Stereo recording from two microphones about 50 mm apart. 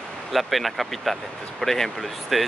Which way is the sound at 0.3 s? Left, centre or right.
Centre.